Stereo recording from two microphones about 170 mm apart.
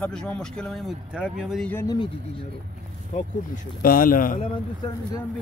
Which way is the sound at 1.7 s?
15° left (ahead or behind).